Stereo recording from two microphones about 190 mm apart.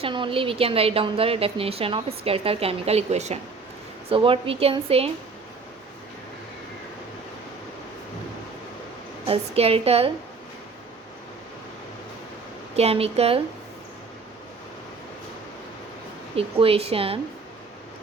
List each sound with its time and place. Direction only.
0.0 s a woman's voice: 25° right (ahead or behind)
9.2 s a woman's voice: 30° right (ahead or behind)
12.7 s a woman's voice: 30° right (ahead or behind)
16.3 s a woman's voice: 30° right (ahead or behind)